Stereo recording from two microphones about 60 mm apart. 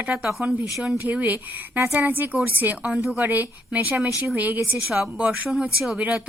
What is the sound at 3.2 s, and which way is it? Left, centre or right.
Speech, right.